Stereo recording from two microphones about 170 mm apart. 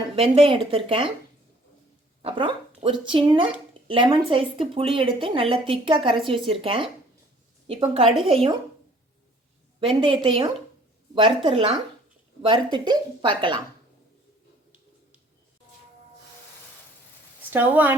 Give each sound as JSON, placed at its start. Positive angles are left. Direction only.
{"t": 0.2, "sound": "a woman's voice", "side_deg": -30}
{"t": 2.2, "sound": "a woman's voice", "side_deg": -30}
{"t": 9.8, "sound": "a woman's voice", "side_deg": -30}
{"t": 17.5, "sound": "speech", "side_deg": -10}